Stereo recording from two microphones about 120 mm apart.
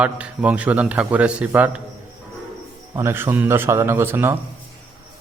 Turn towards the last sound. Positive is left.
turn(degrees=-20)  # may be behind; listen again after turning